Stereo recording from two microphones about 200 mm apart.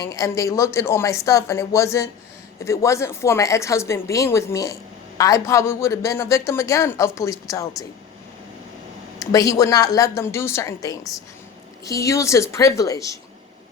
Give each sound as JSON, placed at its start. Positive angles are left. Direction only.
{"t": 0.0, "sound": "a woman's voice", "side_deg": 15}
{"t": 9.1, "sound": "a woman's voice", "side_deg": 15}